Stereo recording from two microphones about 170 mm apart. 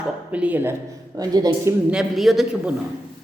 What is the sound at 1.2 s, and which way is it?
Speech, 20° right (ahead or behind).